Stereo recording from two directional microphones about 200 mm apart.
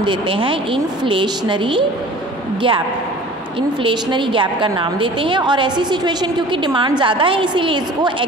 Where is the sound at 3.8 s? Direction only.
25° right (ahead or behind).